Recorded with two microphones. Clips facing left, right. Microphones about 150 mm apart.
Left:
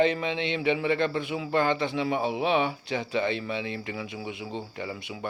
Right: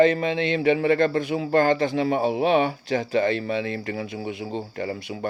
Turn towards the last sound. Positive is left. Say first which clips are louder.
# right 6 dB
turn(degrees=-45)  # may be behind; listen again after turning